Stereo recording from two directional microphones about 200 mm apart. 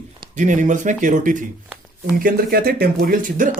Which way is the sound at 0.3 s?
40° right (ahead or behind).